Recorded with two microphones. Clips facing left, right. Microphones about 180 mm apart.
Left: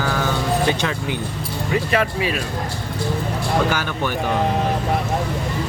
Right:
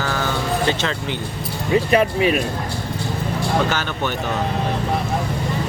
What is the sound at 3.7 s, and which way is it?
Speech, 10° left (ahead or behind).